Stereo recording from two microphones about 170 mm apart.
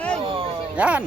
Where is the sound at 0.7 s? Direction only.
10° right (ahead or behind).